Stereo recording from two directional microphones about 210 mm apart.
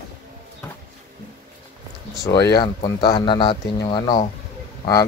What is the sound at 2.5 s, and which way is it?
Speech, 20° left (ahead or behind).